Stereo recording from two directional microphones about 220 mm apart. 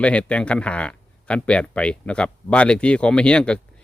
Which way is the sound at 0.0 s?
5° left (ahead or behind).